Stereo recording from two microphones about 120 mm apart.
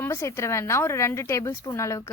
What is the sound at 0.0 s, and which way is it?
A woman's voice, 20° left (ahead or behind).